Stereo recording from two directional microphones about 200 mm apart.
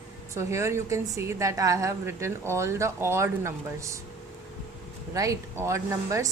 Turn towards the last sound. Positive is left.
turn(degrees=-15)  # may be behind; listen again after turning